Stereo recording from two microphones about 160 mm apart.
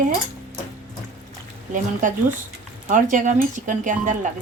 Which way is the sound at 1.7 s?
55° right (ahead or behind).